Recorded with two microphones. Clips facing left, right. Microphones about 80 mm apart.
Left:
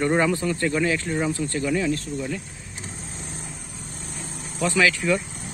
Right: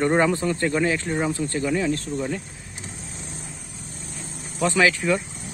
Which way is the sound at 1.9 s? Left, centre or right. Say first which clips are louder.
Right 1 dB; right.